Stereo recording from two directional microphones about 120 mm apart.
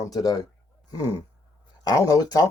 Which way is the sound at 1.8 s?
30° left (ahead or behind).